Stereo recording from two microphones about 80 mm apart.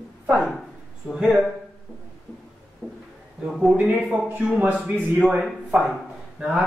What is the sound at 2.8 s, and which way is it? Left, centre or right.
Speech, centre.